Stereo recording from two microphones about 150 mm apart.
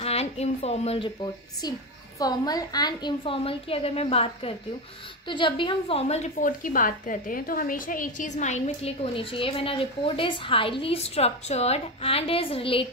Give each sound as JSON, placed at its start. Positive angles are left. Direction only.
{"t": 0.0, "sound": "a woman's voice", "side_deg": 45}